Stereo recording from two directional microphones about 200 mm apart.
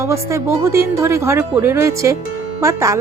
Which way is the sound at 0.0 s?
15° right (ahead or behind).